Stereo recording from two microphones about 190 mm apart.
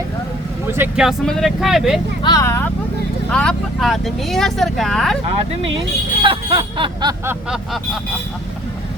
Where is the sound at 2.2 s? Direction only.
15° left (ahead or behind).